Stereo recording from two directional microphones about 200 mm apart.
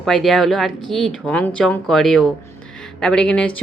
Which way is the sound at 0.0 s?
Centre (ahead or behind).